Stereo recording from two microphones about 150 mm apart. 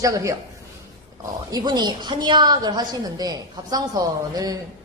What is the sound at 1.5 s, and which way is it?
A woman's voice, 25° right (ahead or behind).